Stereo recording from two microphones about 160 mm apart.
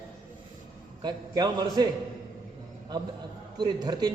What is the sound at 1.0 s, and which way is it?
Speech, 25° right (ahead or behind).